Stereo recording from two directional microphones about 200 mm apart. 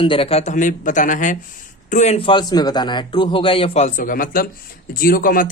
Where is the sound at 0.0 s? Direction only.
25° left (ahead or behind).